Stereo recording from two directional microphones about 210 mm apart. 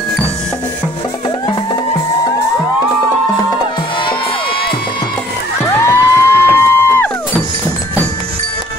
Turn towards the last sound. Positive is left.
turn(degrees=10)  # may be behind; listen again after turning